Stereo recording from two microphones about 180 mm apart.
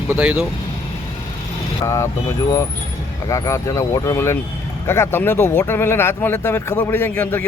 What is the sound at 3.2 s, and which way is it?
Speech, 20° left (ahead or behind).